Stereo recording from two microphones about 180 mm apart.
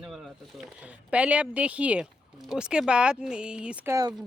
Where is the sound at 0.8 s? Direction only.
5° right (ahead or behind).